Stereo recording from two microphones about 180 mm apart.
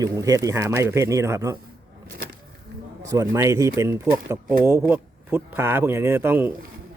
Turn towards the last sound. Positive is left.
turn(degrees=-10)  # may be behind; listen again after turning